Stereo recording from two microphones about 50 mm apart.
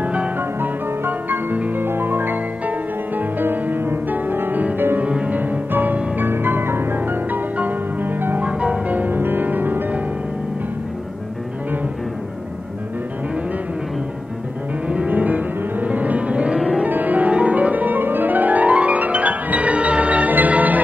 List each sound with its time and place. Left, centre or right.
0.0 s music: right
0.4 s music: right
4.9 s music: right
8.4 s music: right
14.9 s music: right
16.5 s music: centre
16.8 s music: right